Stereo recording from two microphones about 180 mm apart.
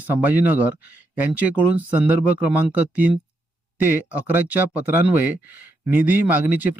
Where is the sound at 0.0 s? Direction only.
10° right (ahead or behind).